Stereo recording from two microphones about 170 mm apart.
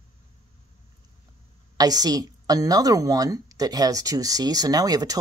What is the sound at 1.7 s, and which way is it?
A woman's voice, 20° right (ahead or behind).